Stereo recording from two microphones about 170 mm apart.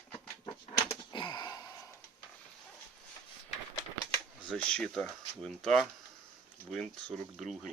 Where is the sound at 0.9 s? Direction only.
25° left (ahead or behind).